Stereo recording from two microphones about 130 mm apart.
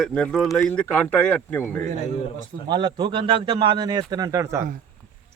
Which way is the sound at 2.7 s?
35° right (ahead or behind).